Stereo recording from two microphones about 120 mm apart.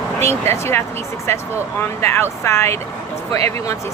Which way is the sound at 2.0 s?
20° left (ahead or behind).